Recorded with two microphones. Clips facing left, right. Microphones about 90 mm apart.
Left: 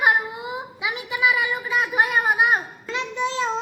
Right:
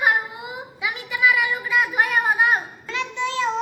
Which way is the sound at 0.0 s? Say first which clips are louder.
Left 1 dB; 25° left (ahead or behind).